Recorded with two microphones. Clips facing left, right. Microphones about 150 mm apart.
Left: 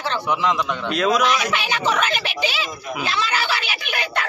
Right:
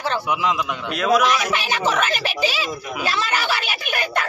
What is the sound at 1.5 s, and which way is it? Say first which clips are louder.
A woman's voice: even; 40° right (ahead or behind).